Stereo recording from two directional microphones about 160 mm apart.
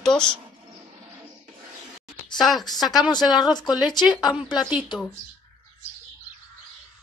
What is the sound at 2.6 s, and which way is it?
Speech, 25° left (ahead or behind).